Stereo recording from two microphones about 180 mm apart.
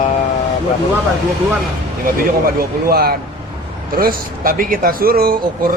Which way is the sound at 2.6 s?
55° right (ahead or behind).